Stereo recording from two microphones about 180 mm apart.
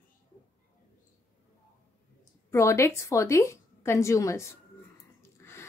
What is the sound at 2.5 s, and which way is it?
A woman's voice, 15° left (ahead or behind).